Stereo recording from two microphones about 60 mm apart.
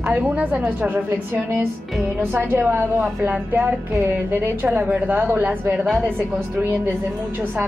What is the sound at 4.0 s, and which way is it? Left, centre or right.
Speech, right.